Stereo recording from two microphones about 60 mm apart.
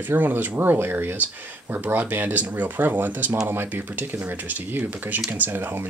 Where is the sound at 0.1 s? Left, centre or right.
Right.